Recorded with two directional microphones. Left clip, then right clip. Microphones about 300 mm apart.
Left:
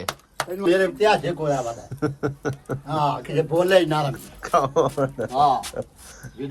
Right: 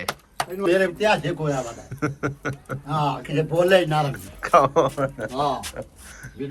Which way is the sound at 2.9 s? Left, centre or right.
Left.